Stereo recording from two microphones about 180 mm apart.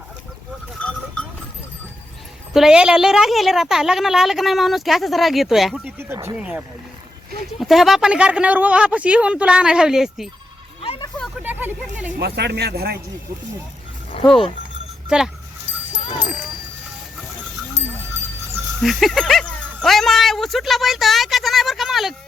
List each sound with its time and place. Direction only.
0.8 s sheep: 5° left (ahead or behind)
2.5 s a woman's voice: 5° right (ahead or behind)
6.0 s speech: 15° right (ahead or behind)
7.6 s a woman's voice: centre (ahead or behind)
10.8 s a sound: 30° left (ahead or behind)
11.4 s a sound: 10° right (ahead or behind)
12.2 s speech: 65° right (ahead or behind)
14.1 s speech: 30° left (ahead or behind)
15.1 s a woman's voice: 5° right (ahead or behind)
16.1 s sheep: 5° right (ahead or behind)
18.8 s a sound: centre (ahead or behind)